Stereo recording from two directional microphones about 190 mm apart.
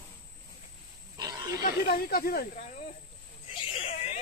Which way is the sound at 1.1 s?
20° right (ahead or behind).